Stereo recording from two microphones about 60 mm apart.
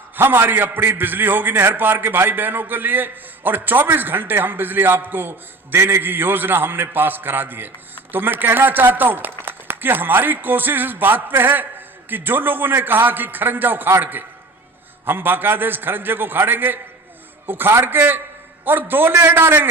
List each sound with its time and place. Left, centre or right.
0.2 s a man's voice: right